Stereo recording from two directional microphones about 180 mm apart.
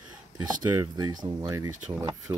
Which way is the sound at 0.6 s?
20° right (ahead or behind).